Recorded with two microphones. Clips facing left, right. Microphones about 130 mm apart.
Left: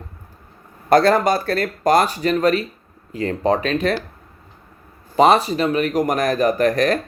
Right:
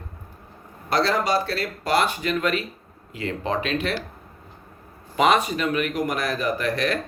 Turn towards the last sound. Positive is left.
turn(degrees=45)  # may be behind; listen again after turning